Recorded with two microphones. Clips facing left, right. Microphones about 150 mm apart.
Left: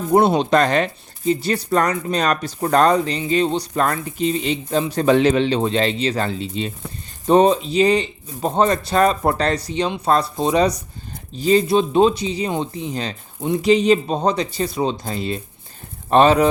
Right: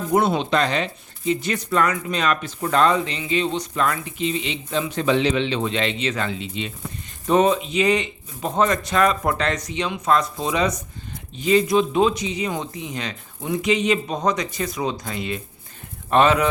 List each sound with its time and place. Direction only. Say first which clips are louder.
0.1 s speech: left 5 dB; 35° left (ahead or behind)